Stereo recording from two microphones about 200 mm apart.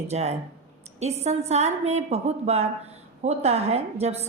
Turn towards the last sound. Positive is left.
turn(degrees=-30)  # may be behind; listen again after turning